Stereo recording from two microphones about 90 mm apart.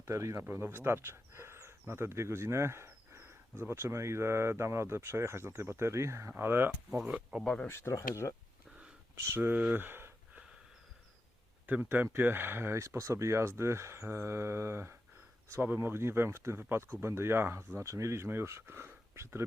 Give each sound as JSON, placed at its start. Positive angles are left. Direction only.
{"t": 0.0, "sound": "speech", "side_deg": -35}
{"t": 7.1, "sound": "speech", "side_deg": -10}
{"t": 7.4, "sound": "speech", "side_deg": 10}
{"t": 7.7, "sound": "speech", "side_deg": 30}
{"t": 9.2, "sound": "speech", "side_deg": -25}
{"t": 9.7, "sound": "a sound", "side_deg": -25}
{"t": 11.6, "sound": "speech", "side_deg": -20}